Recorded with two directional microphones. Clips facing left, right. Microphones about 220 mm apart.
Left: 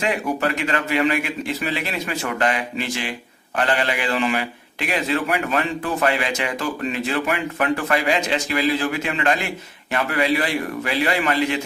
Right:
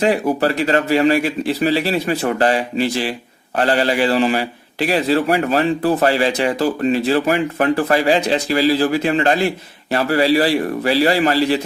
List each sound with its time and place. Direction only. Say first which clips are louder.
0.0 s speech: right 6 dB; 35° right (ahead or behind)